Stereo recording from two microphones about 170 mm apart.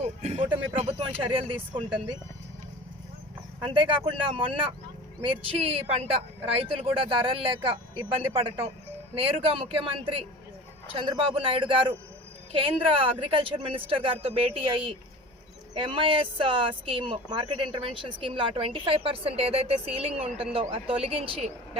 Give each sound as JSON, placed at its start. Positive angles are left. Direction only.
{"t": 0.0, "sound": "speech", "side_deg": -40}
{"t": 3.6, "sound": "speech", "side_deg": -30}